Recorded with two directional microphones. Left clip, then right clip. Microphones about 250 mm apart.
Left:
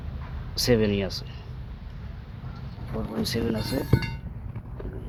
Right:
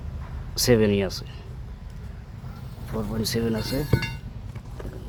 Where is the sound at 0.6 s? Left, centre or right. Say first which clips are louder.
Right 3 dB; right.